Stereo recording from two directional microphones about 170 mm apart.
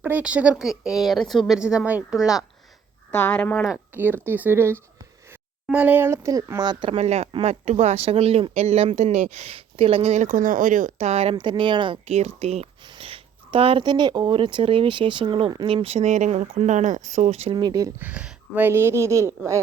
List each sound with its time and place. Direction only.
0.0 s a woman's voice: 10° right (ahead or behind)
3.1 s speech: 10° left (ahead or behind)
3.6 s speech: 5° right (ahead or behind); by 17.5 s 40° right (ahead or behind)
17.5 s speech: 25° right (ahead or behind)
18.0 s speech: 5° right (ahead or behind)